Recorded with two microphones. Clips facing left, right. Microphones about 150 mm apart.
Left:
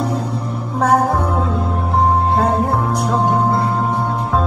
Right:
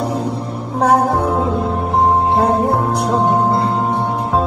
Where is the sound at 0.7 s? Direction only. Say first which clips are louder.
Right 1 dB; 20° right (ahead or behind).